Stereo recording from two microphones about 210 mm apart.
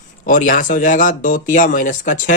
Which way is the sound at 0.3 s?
40° left (ahead or behind).